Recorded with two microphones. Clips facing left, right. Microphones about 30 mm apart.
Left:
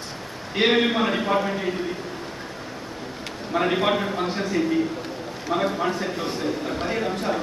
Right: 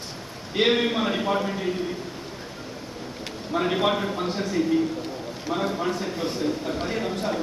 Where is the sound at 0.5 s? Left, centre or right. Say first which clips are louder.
Left 2 dB; centre.